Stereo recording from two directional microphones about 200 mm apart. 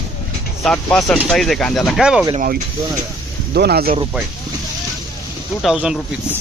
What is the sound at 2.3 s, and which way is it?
Speech, 45° right (ahead or behind).